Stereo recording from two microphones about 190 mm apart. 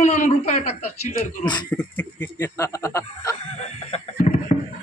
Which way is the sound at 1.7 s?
5° left (ahead or behind).